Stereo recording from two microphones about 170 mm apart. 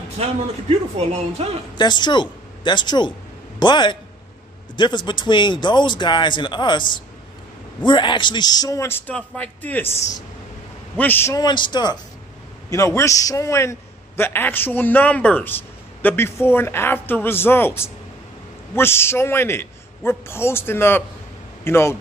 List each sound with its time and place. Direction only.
0.2 s speech: 40° right (ahead or behind)
1.8 s a man's voice: 25° left (ahead or behind)
7.8 s a man's voice: 25° left (ahead or behind); by 9.9 s 10° left (ahead or behind)
11.0 s a man's voice: 10° left (ahead or behind)